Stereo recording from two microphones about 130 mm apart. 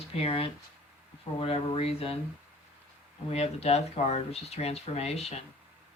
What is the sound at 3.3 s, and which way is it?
Speech, 55° left (ahead or behind).